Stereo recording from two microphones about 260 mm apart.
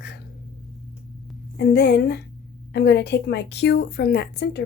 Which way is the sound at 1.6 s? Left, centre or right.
Left.